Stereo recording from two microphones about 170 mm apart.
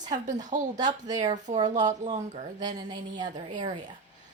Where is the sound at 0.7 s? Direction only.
25° right (ahead or behind).